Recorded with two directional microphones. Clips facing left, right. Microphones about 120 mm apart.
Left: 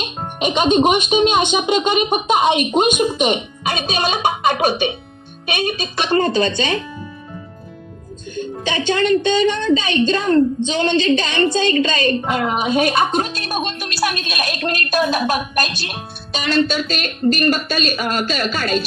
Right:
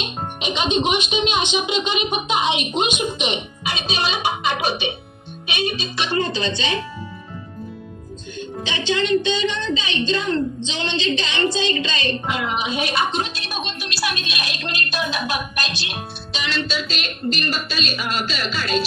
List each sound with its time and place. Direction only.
0.4 s speech: 50° left (ahead or behind)
8.4 s speech: 50° left (ahead or behind)